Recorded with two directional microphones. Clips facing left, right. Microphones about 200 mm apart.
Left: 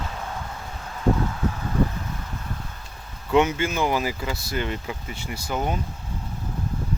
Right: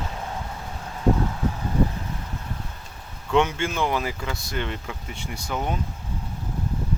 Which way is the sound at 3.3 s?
5° left (ahead or behind).